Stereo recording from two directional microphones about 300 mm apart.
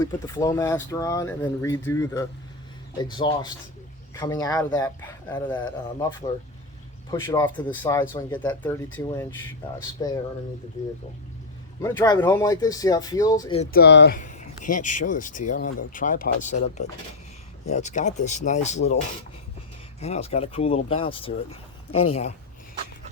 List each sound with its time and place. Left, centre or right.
0.0 s speech: centre
7.1 s speech: centre
13.7 s speech: left
20.0 s speech: left